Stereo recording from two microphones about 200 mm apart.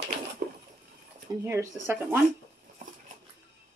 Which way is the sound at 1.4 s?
15° right (ahead or behind).